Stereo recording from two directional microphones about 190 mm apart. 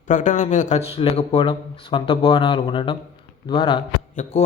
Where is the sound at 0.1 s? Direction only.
40° left (ahead or behind); by 3.8 s 25° left (ahead or behind).